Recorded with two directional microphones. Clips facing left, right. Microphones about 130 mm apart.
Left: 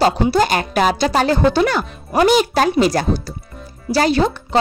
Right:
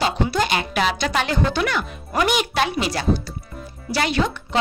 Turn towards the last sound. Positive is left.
turn(degrees=35)  # may be behind; listen again after turning